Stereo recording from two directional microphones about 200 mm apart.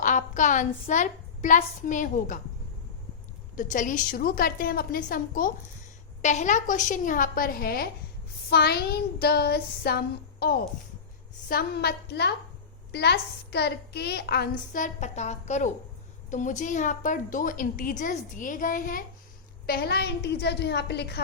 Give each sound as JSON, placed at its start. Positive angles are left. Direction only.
{"t": 0.0, "sound": "a woman's voice", "side_deg": 40}
{"t": 3.5, "sound": "a woman's voice", "side_deg": 40}
{"t": 11.4, "sound": "a woman's voice", "side_deg": 50}